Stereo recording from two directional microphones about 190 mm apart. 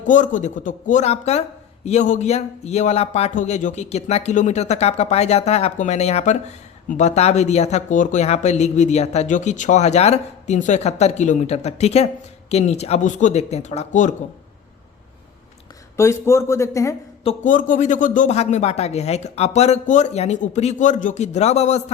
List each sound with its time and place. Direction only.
0.0 s speech: 40° left (ahead or behind)
16.0 s speech: 15° left (ahead or behind)
17.2 s speech: 40° left (ahead or behind)